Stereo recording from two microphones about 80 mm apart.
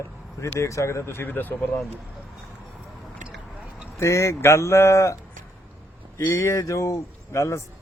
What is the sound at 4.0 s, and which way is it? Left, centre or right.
Speech, left.